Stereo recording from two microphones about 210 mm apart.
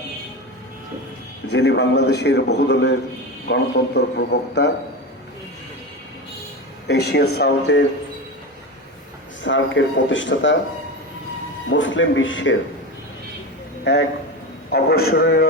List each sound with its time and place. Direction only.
1.5 s a man's voice: 55° left (ahead or behind)
6.8 s a man's voice: 50° left (ahead or behind)
9.4 s speech: 65° left (ahead or behind)
11.7 s speech: 60° left (ahead or behind)
14.7 s a man's voice: 50° left (ahead or behind)